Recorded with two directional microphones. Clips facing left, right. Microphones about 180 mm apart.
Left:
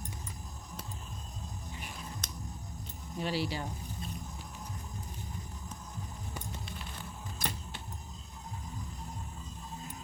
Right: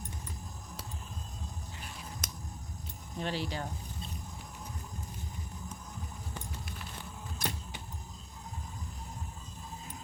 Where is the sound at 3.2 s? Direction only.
10° left (ahead or behind).